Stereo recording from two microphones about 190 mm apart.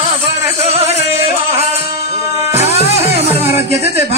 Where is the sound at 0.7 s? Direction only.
35° right (ahead or behind).